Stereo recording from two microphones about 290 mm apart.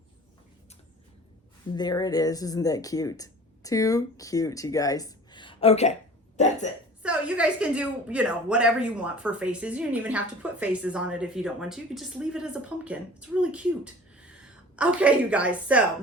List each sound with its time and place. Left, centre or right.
1.7 s speech: centre
7.0 s speech: centre